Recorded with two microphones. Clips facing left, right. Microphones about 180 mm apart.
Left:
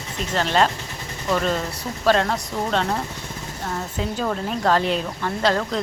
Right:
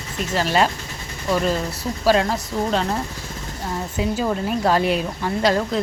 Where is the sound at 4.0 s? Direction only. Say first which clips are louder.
Right 3 dB; 10° right (ahead or behind).